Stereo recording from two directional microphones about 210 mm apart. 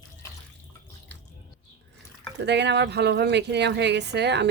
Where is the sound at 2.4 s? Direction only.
55° right (ahead or behind).